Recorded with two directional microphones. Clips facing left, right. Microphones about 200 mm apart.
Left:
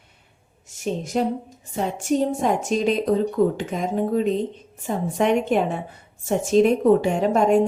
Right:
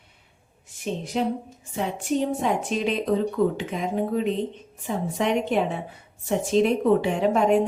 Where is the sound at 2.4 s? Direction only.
45° left (ahead or behind).